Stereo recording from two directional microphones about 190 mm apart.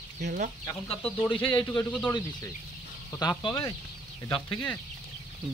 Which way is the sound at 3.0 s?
20° left (ahead or behind).